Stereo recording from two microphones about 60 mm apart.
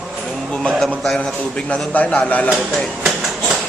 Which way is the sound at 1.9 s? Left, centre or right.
Left.